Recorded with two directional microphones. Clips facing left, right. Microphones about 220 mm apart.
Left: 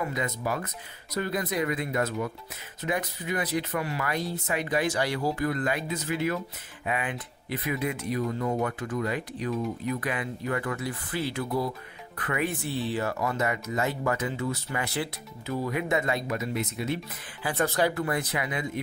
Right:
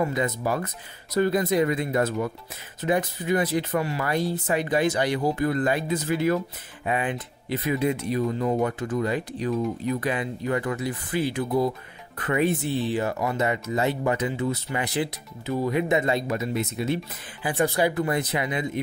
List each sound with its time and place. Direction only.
0.0 s speech: 30° right (ahead or behind)
17.5 s speech: 15° right (ahead or behind)